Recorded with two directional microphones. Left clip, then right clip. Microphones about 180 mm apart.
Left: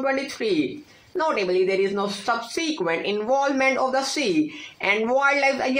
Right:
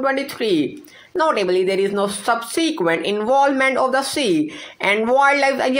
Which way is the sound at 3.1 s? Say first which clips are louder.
Right 6 dB; 20° right (ahead or behind).